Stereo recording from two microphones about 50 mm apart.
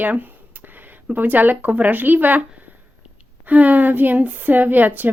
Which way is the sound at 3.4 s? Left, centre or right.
Right.